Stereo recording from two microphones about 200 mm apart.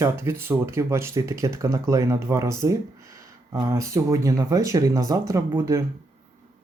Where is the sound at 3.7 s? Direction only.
15° right (ahead or behind).